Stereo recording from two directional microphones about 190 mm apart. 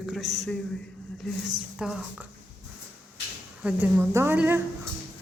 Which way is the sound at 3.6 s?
10° right (ahead or behind).